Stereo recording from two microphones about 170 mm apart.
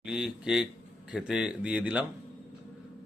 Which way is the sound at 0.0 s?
5° right (ahead or behind).